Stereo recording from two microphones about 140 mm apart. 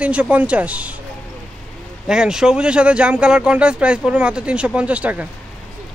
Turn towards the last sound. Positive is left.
turn(degrees=-10)  # may be behind; listen again after turning